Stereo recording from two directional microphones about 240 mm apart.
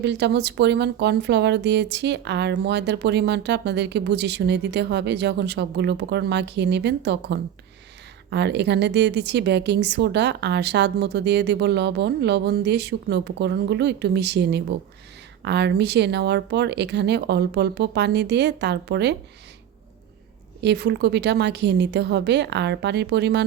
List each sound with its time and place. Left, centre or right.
0.0 s speech: right
20.6 s speech: right